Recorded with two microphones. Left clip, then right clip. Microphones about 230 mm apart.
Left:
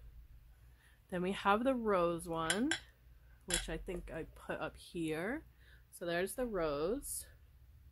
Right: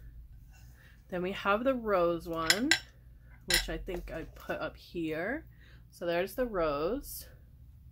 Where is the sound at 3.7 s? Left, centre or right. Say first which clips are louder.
Right 5 dB; left.